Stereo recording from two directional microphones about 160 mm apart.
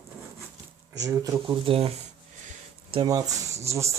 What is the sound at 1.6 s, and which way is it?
Speech, 35° right (ahead or behind).